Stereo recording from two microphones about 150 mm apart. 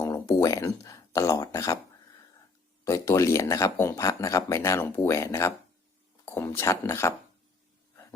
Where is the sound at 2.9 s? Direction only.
20° left (ahead or behind).